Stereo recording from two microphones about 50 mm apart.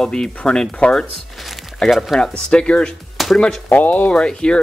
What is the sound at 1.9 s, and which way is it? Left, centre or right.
Speech, centre.